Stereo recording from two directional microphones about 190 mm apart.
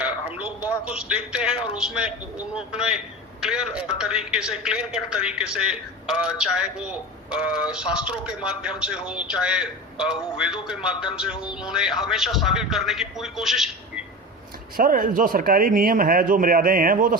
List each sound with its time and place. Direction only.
0.0 s a man's voice: 5° right (ahead or behind)
14.8 s speech: 45° right (ahead or behind)